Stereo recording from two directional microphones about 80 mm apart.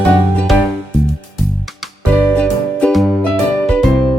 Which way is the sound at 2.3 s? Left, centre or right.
Centre.